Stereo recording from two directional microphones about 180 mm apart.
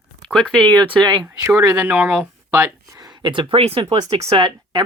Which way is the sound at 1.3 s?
15° right (ahead or behind).